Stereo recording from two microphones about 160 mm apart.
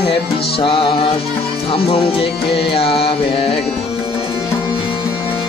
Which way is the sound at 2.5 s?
35° left (ahead or behind).